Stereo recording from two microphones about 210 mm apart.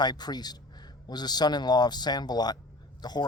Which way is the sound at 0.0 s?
20° left (ahead or behind).